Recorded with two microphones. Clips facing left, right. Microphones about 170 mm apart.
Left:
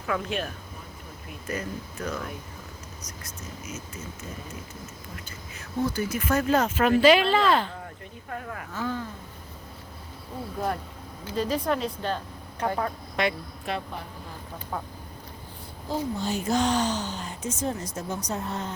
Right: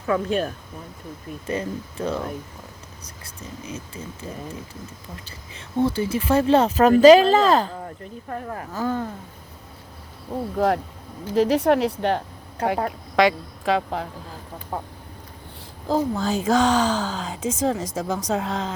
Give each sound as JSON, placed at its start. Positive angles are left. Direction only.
{"t": 0.1, "sound": "speech", "side_deg": -35}
{"t": 11.3, "sound": "a woman's voice", "side_deg": -75}
{"t": 14.7, "sound": "speech", "side_deg": -30}
{"t": 15.9, "sound": "speech", "side_deg": -90}